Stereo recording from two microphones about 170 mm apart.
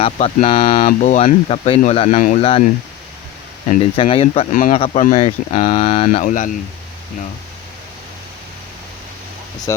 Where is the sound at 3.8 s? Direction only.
35° left (ahead or behind).